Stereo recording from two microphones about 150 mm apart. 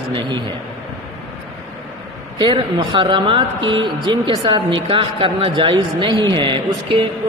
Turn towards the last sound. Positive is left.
turn(degrees=-35)  # may be behind; listen again after turning